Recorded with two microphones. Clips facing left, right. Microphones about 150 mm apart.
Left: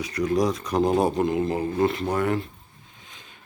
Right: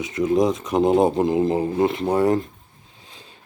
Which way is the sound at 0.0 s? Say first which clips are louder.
Right 4 dB; 20° right (ahead or behind).